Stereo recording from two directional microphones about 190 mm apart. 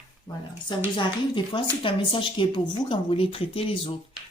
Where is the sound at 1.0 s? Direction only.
25° left (ahead or behind).